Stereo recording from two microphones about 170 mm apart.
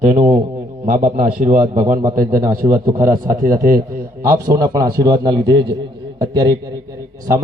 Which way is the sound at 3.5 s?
55° right (ahead or behind).